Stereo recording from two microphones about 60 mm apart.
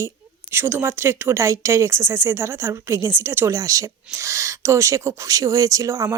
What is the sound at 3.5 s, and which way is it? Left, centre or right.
Speech, right.